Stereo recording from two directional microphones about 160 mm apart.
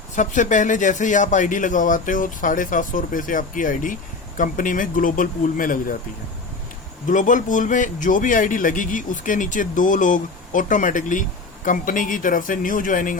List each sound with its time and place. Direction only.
0.2 s speech: 50° left (ahead or behind)
7.1 s speech: 55° left (ahead or behind)